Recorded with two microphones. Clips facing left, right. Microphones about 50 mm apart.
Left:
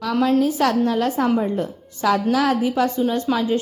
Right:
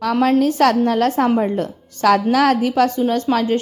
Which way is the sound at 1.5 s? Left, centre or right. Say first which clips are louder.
Right 2 dB; right.